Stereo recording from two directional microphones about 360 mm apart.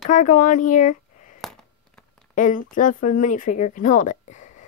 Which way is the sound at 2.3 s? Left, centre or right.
Left.